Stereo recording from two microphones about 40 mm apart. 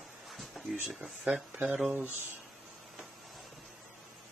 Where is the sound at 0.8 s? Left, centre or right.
Right.